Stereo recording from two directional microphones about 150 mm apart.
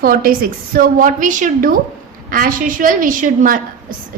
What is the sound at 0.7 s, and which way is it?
A woman's voice, 60° right (ahead or behind).